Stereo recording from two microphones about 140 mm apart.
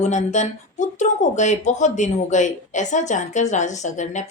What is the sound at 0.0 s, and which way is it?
Speech, 55° left (ahead or behind).